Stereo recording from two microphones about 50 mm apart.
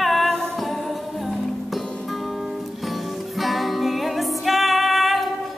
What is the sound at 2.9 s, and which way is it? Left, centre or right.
Music, centre.